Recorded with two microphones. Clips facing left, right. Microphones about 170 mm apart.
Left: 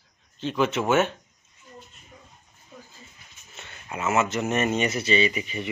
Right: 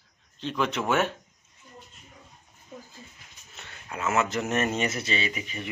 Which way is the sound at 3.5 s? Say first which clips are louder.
Left 2 dB; centre (ahead or behind).